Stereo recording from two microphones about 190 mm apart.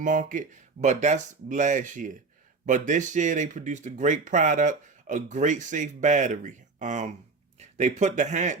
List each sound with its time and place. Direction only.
0.0 s speech: 45° right (ahead or behind)